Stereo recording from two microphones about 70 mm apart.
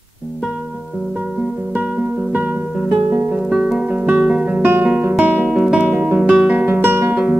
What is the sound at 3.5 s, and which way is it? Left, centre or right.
Music, centre.